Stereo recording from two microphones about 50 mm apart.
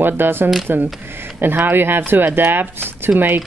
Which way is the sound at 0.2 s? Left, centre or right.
Right.